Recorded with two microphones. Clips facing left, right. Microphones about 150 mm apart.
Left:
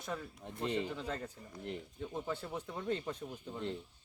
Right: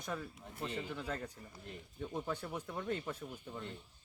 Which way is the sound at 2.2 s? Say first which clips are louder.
Left 1 dB; 10° left (ahead or behind).